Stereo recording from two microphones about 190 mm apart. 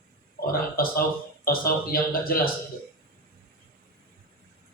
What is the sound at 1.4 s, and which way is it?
A man's voice, 50° left (ahead or behind).